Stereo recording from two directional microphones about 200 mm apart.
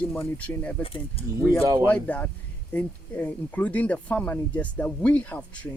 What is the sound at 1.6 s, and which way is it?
Speech, 20° right (ahead or behind).